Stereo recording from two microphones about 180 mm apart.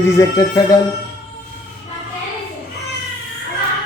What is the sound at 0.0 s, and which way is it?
Speech, 20° left (ahead or behind).